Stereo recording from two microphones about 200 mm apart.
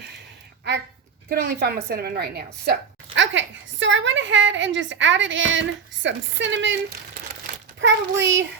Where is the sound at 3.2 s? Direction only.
65° right (ahead or behind).